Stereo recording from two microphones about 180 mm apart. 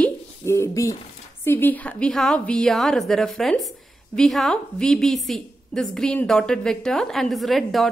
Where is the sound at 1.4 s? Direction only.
10° left (ahead or behind).